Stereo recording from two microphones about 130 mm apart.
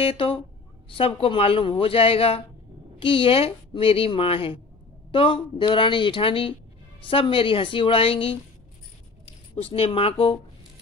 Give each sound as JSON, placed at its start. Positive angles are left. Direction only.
{"t": 0.0, "sound": "speech", "side_deg": 45}